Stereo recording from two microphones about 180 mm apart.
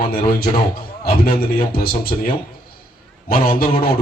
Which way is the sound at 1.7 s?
55° left (ahead or behind).